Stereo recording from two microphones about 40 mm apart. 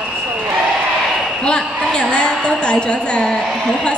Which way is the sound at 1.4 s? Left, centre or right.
Left.